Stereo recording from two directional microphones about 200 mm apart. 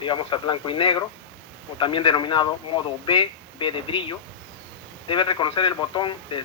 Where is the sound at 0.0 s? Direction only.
25° left (ahead or behind).